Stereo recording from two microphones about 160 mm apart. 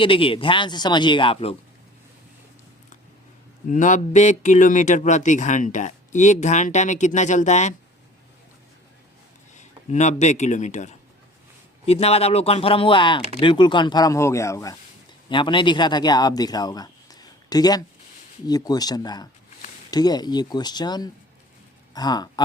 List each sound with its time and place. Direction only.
0.0 s speech: 35° left (ahead or behind)
3.7 s speech: 50° left (ahead or behind)
9.6 s speech: 45° left (ahead or behind); by 14.8 s 20° left (ahead or behind)
15.3 s speech: 30° left (ahead or behind)